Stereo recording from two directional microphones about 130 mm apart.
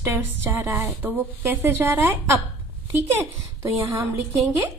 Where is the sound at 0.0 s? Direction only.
20° right (ahead or behind).